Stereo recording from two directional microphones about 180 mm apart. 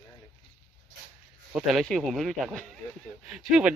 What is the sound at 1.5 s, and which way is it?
Speech, centre (ahead or behind).